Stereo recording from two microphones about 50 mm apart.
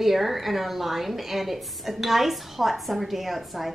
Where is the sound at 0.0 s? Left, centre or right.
Centre.